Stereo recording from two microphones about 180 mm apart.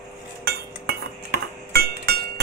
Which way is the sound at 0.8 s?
60° right (ahead or behind).